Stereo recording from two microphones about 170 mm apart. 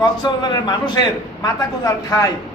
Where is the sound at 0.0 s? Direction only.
25° left (ahead or behind).